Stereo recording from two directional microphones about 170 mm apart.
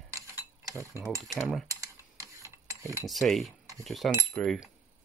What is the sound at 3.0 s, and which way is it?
Speech, centre (ahead or behind).